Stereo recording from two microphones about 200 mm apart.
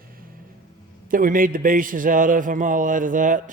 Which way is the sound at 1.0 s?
45° right (ahead or behind).